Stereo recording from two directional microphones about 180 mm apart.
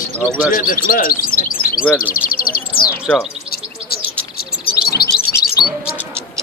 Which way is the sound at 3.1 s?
10° left (ahead or behind).